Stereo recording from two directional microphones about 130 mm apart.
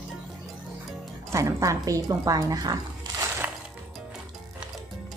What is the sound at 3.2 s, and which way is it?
Music, 20° right (ahead or behind).